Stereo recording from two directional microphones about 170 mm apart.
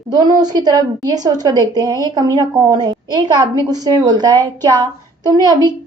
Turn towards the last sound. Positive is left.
turn(degrees=-25)  # may be behind; listen again after turning